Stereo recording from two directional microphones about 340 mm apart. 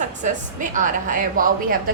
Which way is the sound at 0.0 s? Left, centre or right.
Right.